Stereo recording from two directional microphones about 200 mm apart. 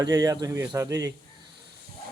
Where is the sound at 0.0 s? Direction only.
20° right (ahead or behind).